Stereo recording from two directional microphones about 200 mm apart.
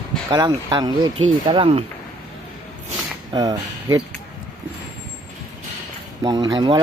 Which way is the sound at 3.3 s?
20° right (ahead or behind).